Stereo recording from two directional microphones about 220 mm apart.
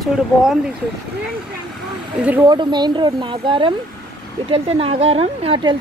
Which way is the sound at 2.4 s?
20° right (ahead or behind).